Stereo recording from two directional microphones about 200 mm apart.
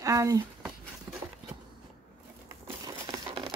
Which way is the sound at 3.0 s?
25° right (ahead or behind).